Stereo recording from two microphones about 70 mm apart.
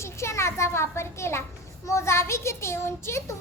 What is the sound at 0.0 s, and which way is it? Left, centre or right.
A child's voice, left.